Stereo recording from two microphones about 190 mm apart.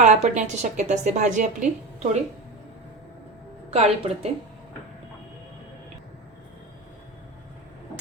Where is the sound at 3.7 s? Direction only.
35° right (ahead or behind).